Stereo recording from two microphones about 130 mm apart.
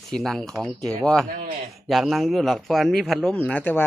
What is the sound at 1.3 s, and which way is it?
Speech, 90° right.